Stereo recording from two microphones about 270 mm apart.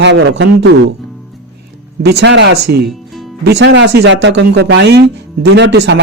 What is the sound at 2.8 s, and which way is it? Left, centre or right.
Music, centre.